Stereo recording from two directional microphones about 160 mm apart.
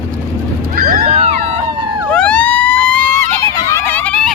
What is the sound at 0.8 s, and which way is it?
Wild animals, 65° right (ahead or behind).